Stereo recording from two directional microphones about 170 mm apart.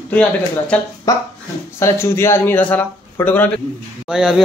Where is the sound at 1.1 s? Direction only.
20° left (ahead or behind).